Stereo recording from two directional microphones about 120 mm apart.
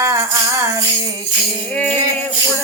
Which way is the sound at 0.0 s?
25° right (ahead or behind).